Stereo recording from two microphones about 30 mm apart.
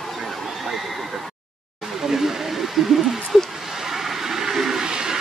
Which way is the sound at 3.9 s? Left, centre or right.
Centre.